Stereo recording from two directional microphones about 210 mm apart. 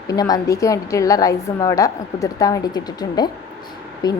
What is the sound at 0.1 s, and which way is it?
A woman's voice, 15° left (ahead or behind).